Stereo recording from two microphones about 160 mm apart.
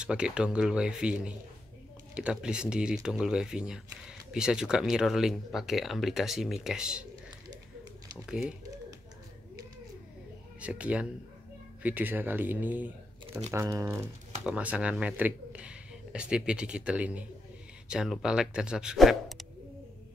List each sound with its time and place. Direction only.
0.0 s speech: 5° right (ahead or behind)
8.3 s speech: 5° right (ahead or behind)
10.6 s speech: 10° right (ahead or behind)